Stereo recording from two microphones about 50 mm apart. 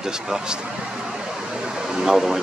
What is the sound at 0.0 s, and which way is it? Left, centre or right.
Speech, centre.